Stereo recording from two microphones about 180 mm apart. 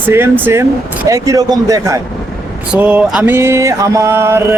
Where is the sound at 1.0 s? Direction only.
20° right (ahead or behind).